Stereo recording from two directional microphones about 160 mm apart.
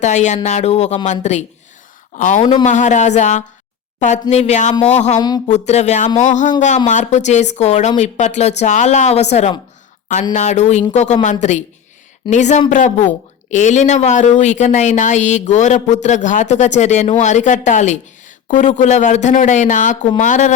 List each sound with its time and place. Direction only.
0.0 s speech: 45° left (ahead or behind)
2.1 s speech: 55° left (ahead or behind)
2.4 s a man's voice: 30° left (ahead or behind)
2.6 s speech: 50° left (ahead or behind)